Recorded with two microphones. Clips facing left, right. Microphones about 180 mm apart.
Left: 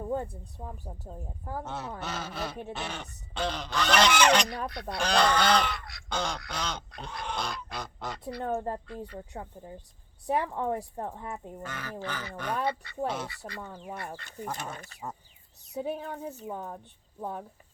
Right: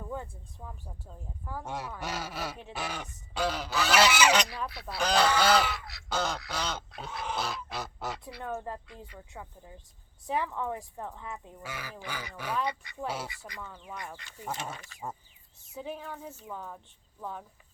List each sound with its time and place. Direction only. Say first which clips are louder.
0.0 s a sound: left 7 dB; 45° left (ahead or behind)
0.6 s a woman's voice: left 4 dB; 40° left (ahead or behind)
1.6 s speech: even; 10° right (ahead or behind)
8.4 s a woman's voice: left 4 dB; 45° left (ahead or behind)
11.6 s speech: left 4 dB; 10° right (ahead or behind)
13.6 s a woman's voice: left 3 dB; 40° left (ahead or behind)